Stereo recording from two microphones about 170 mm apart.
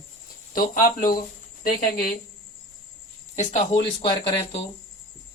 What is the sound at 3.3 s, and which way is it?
Speech, 45° left (ahead or behind).